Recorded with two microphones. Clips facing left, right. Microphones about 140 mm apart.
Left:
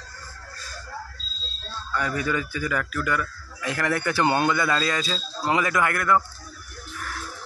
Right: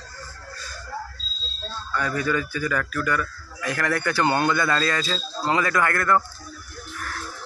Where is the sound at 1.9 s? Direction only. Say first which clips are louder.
Right 1 dB; 20° left (ahead or behind).